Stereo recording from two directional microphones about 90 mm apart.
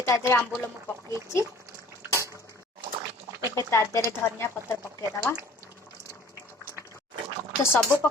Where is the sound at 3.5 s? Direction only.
35° left (ahead or behind).